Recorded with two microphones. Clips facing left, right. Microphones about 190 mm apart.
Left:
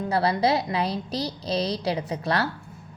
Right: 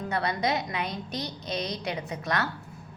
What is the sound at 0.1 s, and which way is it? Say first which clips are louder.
A woman's voice: left 6 dB; 30° left (ahead or behind).